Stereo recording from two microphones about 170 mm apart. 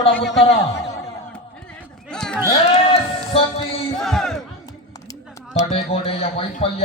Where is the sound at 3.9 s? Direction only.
Centre (ahead or behind).